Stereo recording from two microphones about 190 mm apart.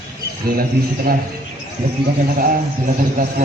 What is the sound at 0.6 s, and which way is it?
Speech, 50° right (ahead or behind).